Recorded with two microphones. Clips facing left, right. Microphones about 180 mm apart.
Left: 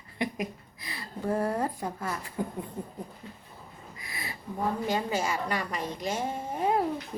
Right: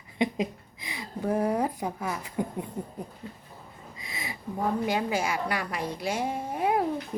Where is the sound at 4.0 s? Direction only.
20° right (ahead or behind).